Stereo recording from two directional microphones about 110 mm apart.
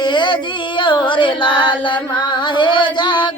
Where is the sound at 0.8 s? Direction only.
45° left (ahead or behind).